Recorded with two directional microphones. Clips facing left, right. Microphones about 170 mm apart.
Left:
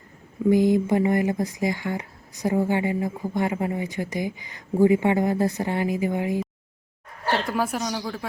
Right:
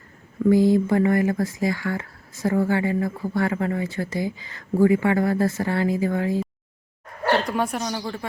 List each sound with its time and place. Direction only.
0.4 s speech: 20° left (ahead or behind)
7.4 s speech: centre (ahead or behind)